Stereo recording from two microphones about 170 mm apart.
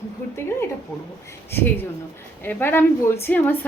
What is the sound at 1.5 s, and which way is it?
A woman's voice, 10° left (ahead or behind).